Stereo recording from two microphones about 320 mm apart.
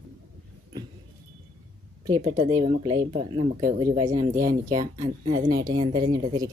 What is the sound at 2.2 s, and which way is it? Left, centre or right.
A woman's voice, right.